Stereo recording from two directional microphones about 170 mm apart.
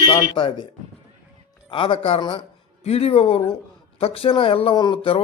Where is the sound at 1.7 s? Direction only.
30° left (ahead or behind).